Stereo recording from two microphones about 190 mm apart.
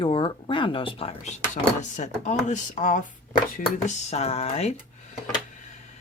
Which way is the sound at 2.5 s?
40° left (ahead or behind).